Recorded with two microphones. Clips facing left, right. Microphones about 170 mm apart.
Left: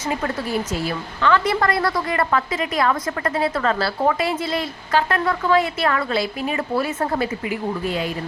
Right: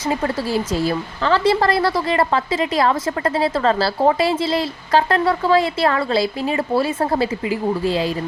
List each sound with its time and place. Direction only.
0.1 s a woman's voice: 30° right (ahead or behind)